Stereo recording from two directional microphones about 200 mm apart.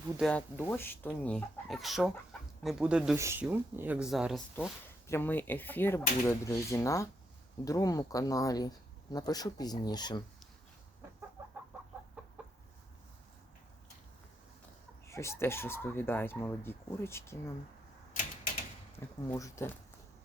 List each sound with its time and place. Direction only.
0.2 s speech: 5° left (ahead or behind)
5.0 s speech: 10° left (ahead or behind)
11.4 s chicken: 10° right (ahead or behind)
15.0 s speech: 15° left (ahead or behind)
18.9 s speech: 15° left (ahead or behind)